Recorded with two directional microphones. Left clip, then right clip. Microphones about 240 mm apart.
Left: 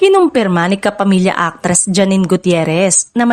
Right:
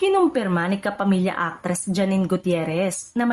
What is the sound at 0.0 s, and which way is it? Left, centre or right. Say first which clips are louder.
A woman's voice: left 9 dB; left.